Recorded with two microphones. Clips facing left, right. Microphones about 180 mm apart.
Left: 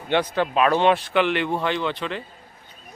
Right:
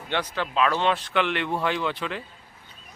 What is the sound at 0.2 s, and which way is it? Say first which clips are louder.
Speech: left 3 dB; 55° left (ahead or behind).